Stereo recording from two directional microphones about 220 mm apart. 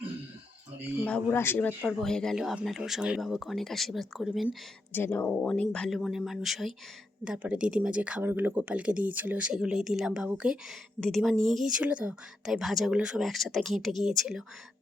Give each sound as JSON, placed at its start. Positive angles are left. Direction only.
{"t": 1.0, "sound": "speech", "side_deg": 10}
{"t": 4.9, "sound": "speech", "side_deg": 10}